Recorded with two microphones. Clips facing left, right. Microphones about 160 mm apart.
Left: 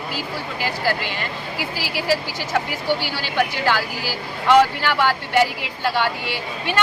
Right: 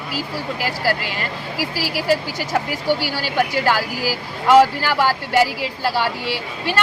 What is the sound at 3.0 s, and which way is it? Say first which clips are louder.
A woman's voice: right 2 dB; 40° right (ahead or behind).